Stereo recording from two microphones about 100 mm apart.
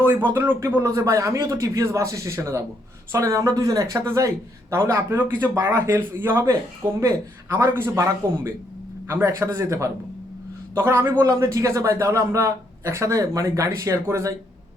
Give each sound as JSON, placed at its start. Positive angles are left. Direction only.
{"t": 0.0, "sound": "a man's voice", "side_deg": -20}
{"t": 7.5, "sound": "speech", "side_deg": -25}